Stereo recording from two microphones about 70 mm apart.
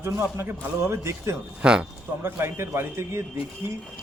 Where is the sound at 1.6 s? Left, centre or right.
Centre.